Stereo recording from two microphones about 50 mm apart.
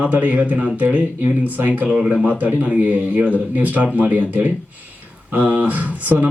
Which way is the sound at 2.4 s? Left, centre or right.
Right.